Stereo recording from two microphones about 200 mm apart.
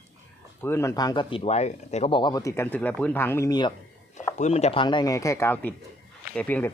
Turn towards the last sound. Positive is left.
turn(degrees=10)  # may be behind; listen again after turning